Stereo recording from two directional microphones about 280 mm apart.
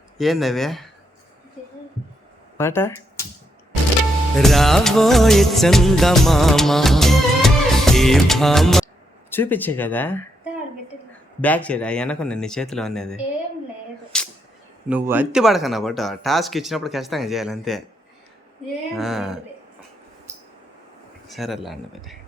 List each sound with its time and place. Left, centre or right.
0.2 s speech: centre
2.6 s speech: centre
4.4 s music of bollywood: centre
9.3 s speech: centre
11.3 s speech: centre
14.1 s a sound: centre
14.8 s speech: centre
18.9 s speech: centre
21.2 s speech: centre